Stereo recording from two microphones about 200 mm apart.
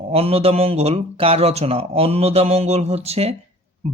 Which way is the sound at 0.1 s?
30° right (ahead or behind).